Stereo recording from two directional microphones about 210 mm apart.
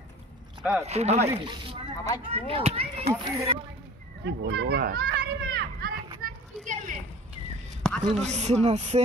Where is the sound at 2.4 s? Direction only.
30° right (ahead or behind).